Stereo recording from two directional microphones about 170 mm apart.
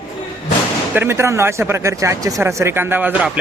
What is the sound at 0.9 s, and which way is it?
Speech, 15° right (ahead or behind).